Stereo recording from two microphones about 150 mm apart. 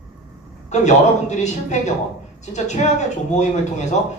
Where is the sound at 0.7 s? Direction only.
50° left (ahead or behind).